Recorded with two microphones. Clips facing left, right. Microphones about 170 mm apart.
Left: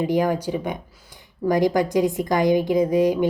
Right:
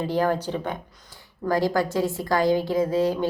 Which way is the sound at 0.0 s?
15° left (ahead or behind).